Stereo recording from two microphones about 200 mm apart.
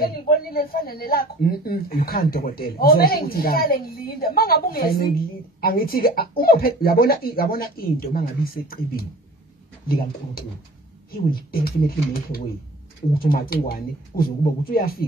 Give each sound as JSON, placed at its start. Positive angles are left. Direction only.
{"t": 0.0, "sound": "speech", "side_deg": 50}